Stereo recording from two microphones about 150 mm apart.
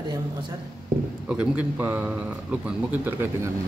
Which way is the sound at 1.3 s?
10° right (ahead or behind).